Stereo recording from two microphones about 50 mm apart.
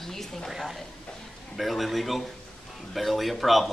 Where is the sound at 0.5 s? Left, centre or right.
Centre.